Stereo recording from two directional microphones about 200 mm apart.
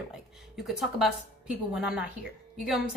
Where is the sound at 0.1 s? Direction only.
Centre (ahead or behind).